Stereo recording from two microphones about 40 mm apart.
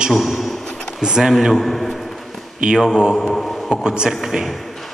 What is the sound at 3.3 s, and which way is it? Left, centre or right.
Speech, centre.